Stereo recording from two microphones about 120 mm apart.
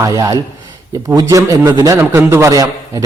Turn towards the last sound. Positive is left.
turn(degrees=-30)  # may be behind; listen again after turning